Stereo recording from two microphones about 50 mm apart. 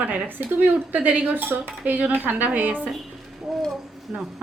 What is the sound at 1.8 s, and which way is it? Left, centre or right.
Cutlery, right.